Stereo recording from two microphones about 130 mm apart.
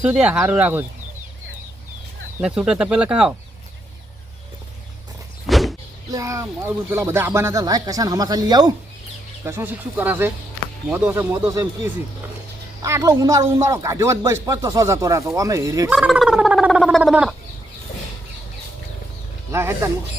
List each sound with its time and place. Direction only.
0.0 s speech: 10° right (ahead or behind)
2.4 s speech: 5° right (ahead or behind)
5.5 s vehicle: centre (ahead or behind)
6.1 s speech: 25° right (ahead or behind)
9.4 s speech: 20° right (ahead or behind)
15.9 s gargling: 5° right (ahead or behind)
19.5 s speech: 20° right (ahead or behind)